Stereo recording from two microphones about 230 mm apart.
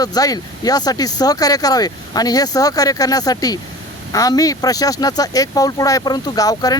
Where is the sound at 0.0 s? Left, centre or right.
Centre.